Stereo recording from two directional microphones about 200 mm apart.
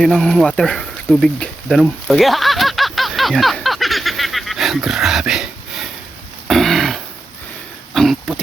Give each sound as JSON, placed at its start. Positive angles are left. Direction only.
{"t": 0.0, "sound": "a sound", "side_deg": 0}
{"t": 6.5, "sound": "throat clearing", "side_deg": 0}
{"t": 8.3, "sound": "speech", "side_deg": 0}